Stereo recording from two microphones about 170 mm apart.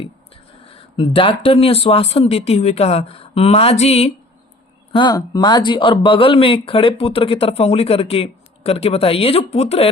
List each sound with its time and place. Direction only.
0.6 s speech: 30° left (ahead or behind)
4.9 s speech: 25° left (ahead or behind)